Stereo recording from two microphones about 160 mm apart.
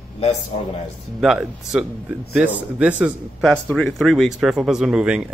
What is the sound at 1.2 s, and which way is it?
Speech, 5° right (ahead or behind).